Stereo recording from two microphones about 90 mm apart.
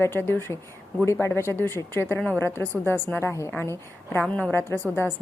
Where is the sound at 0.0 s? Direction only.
25° left (ahead or behind).